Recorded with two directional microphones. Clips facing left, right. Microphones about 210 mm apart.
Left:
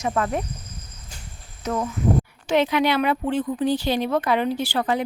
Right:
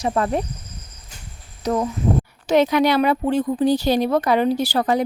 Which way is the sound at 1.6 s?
35° right (ahead or behind).